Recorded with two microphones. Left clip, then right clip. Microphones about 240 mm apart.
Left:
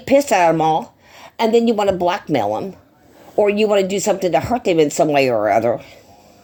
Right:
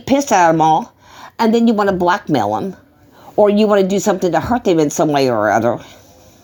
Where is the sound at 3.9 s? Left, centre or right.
Right.